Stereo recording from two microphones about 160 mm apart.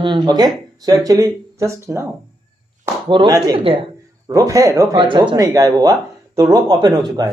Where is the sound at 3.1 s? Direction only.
30° right (ahead or behind).